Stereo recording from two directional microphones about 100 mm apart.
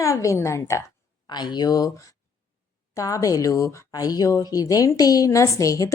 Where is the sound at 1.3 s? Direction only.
45° left (ahead or behind).